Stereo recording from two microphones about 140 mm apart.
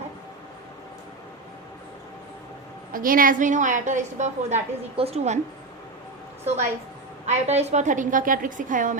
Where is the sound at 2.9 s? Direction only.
85° right; by 5.4 s 50° right (ahead or behind).